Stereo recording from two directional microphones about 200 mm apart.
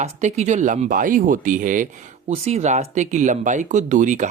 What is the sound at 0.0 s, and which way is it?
Speech, 35° right (ahead or behind).